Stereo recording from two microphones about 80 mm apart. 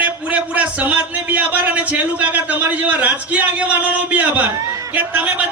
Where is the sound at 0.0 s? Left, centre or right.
Centre.